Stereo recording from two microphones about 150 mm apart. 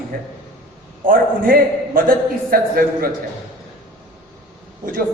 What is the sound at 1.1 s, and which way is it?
A man's voice, 70° right (ahead or behind).